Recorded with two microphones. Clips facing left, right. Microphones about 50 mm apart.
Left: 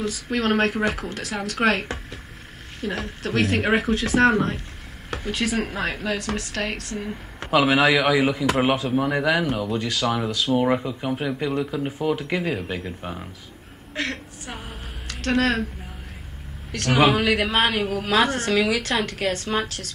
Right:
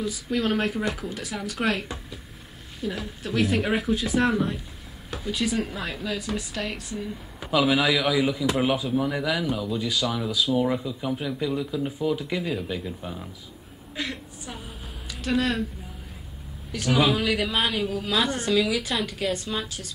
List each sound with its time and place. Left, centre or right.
0.0 s a woman's voice: left
7.3 s a man's voice: left
8.9 s speech: left
9.8 s a woman's voice: left
10.5 s speech: left
12.2 s a man's voice: left
12.4 s speech: left
13.9 s a sound: left
15.0 s speech: left
16.7 s a woman's voice: left